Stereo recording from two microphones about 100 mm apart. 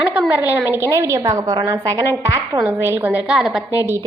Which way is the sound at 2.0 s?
30° right (ahead or behind).